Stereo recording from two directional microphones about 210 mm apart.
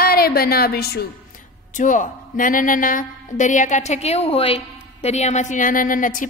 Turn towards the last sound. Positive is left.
turn(degrees=40)  # may be behind; listen again after turning